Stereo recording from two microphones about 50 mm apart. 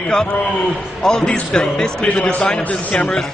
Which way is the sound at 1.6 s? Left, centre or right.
Centre.